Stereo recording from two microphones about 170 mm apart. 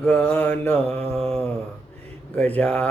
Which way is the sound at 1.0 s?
35° right (ahead or behind).